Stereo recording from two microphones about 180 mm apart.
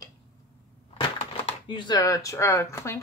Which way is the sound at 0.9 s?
25° left (ahead or behind).